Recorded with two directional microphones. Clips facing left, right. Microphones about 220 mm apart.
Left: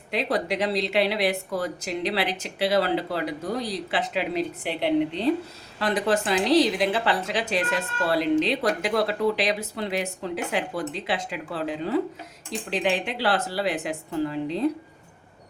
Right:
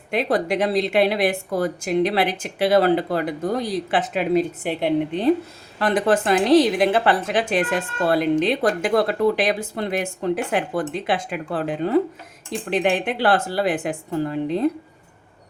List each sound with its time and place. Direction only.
0.1 s a woman's voice: 50° right (ahead or behind)